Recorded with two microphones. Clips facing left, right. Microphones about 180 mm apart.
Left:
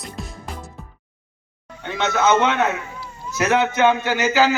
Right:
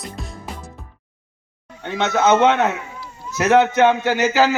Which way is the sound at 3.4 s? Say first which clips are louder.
Right 4 dB; 50° right (ahead or behind).